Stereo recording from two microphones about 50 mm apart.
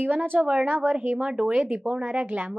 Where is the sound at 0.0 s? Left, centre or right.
Right.